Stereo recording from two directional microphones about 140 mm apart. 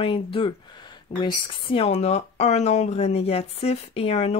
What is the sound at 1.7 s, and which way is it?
Speech, 45° left (ahead or behind).